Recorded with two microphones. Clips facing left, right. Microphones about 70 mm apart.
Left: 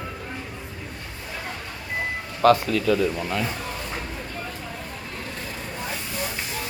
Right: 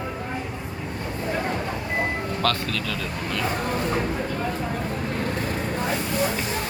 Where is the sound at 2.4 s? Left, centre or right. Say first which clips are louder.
Left 11 dB; centre.